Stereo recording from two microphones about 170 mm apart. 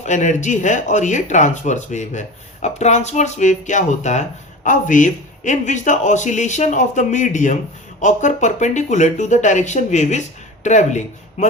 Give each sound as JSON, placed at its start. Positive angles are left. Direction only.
{"t": 0.0, "sound": "speech", "side_deg": 45}